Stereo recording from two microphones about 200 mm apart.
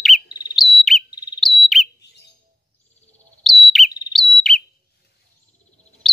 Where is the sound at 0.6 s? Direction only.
Centre (ahead or behind).